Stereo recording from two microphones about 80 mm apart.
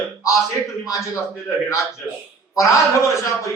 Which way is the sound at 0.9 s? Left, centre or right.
Left.